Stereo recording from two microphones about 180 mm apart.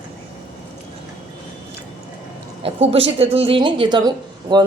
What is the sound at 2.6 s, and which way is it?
Speech, 35° right (ahead or behind).